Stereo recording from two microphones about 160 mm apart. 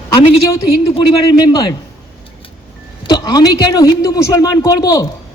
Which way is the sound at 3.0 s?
25° left (ahead or behind).